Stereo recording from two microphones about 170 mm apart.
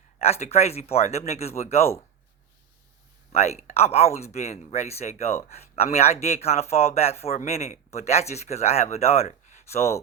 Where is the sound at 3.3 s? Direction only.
40° left (ahead or behind).